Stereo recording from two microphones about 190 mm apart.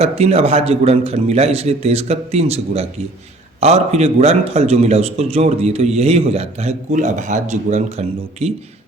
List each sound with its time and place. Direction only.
0.0 s a man's voice: 30° right (ahead or behind)